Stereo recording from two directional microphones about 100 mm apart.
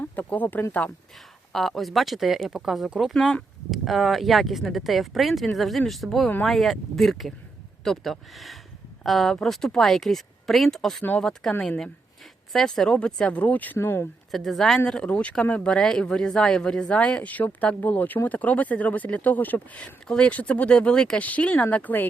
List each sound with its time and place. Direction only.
0.0 s speech: 15° left (ahead or behind)
1.5 s speech: 5° left (ahead or behind)
12.5 s speech: 5° left (ahead or behind); by 14.1 s 25° left (ahead or behind)
14.3 s speech: centre (ahead or behind)